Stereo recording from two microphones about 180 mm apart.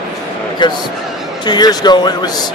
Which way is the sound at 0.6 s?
25° left (ahead or behind).